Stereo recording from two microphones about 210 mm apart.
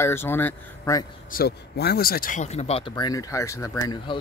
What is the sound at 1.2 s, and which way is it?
Speech, 45° left (ahead or behind).